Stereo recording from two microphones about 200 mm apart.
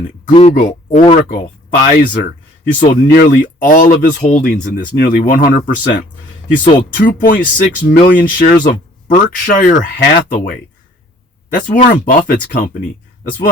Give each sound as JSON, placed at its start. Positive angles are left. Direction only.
{"t": 0.3, "sound": "speech", "side_deg": 30}
{"t": 0.5, "sound": "speech", "side_deg": 50}
{"t": 0.9, "sound": "speech", "side_deg": 35}
{"t": 1.3, "sound": "speech", "side_deg": 50}